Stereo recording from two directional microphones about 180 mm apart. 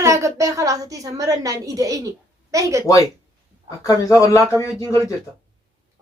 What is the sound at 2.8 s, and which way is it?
Speech, 20° left (ahead or behind).